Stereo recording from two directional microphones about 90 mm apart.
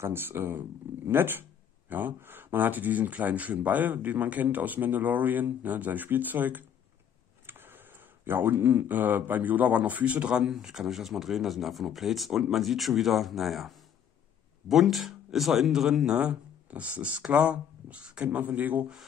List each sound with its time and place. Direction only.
0.0 s speech: 25° right (ahead or behind)
7.4 s a sound: 25° right (ahead or behind)
8.3 s a man's voice: 25° right (ahead or behind)